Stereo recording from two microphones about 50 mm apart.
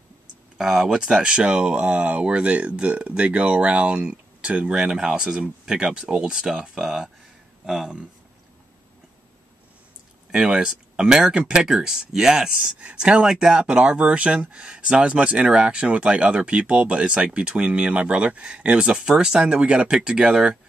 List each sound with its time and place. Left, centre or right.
0.6 s speech: centre
1.0 s speech: centre
10.3 s speech: centre
13.6 s speech: right